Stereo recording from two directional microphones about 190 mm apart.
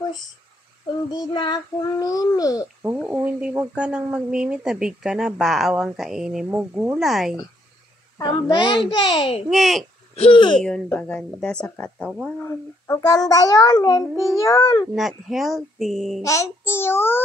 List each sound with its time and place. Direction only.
1.1 s a child's voice: 25° left (ahead or behind)
2.8 s speech: 10° right (ahead or behind)
8.2 s a child's voice: 20° left (ahead or behind)
9.5 s speech: centre (ahead or behind)
10.1 s a child's voice: 30° left (ahead or behind)
10.6 s a child's voice: 5° left (ahead or behind)
15.0 s speech: centre (ahead or behind)
16.2 s a child's voice: 15° left (ahead or behind)